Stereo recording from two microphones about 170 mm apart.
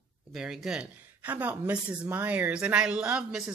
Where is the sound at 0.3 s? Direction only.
Centre (ahead or behind).